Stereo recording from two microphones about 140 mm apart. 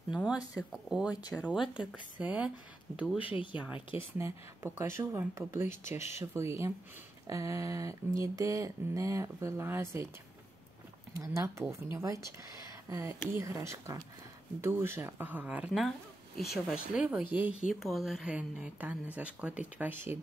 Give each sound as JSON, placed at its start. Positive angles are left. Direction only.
{"t": 0.1, "sound": "a woman's voice", "side_deg": -5}
{"t": 3.2, "sound": "speech", "side_deg": 40}
{"t": 3.5, "sound": "a woman's voice", "side_deg": -10}
{"t": 11.1, "sound": "speech", "side_deg": -20}
{"t": 13.3, "sound": "a woman's voice", "side_deg": -20}
{"t": 17.6, "sound": "a woman's voice", "side_deg": 0}